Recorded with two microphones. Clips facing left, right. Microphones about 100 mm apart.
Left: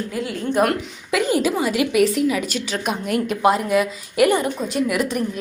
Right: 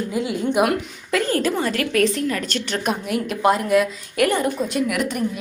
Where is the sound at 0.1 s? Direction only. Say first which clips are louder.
Right 3 dB; 20° right (ahead or behind).